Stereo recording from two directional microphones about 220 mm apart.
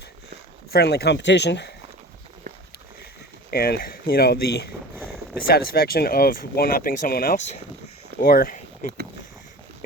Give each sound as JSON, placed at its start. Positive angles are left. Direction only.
{"t": 0.7, "sound": "speech", "side_deg": 45}
{"t": 3.5, "sound": "speech", "side_deg": 45}